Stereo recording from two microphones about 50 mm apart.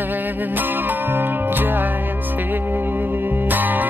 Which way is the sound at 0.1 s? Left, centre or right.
Right.